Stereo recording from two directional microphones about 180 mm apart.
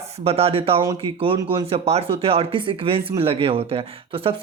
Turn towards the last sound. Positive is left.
turn(degrees=-30)  # may be behind; listen again after turning